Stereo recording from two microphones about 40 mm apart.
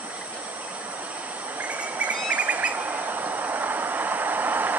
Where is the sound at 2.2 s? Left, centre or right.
Right.